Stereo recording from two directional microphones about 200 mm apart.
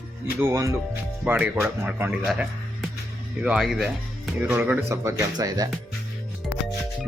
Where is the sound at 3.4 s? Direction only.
Centre (ahead or behind).